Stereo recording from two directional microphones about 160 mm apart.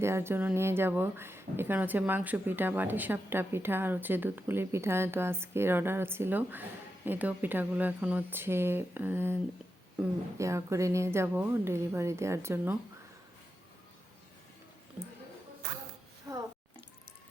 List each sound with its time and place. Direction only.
0.0 s speech: 15° right (ahead or behind)